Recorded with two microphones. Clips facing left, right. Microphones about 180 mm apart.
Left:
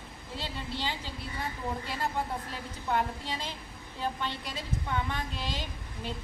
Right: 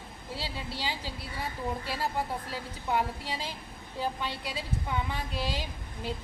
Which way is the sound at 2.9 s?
10° right (ahead or behind).